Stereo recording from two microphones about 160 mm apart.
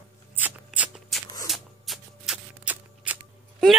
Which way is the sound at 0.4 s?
10° right (ahead or behind).